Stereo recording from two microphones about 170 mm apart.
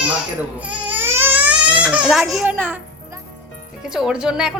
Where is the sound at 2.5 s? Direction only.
10° right (ahead or behind).